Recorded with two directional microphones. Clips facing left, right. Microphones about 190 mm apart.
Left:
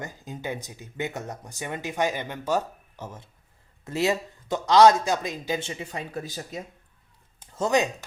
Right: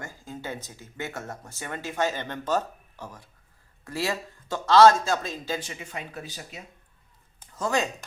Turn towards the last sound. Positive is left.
turn(degrees=20)  # may be behind; listen again after turning